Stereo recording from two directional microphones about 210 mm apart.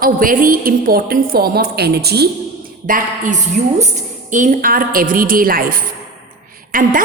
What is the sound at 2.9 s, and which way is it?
A woman's voice, 40° right (ahead or behind).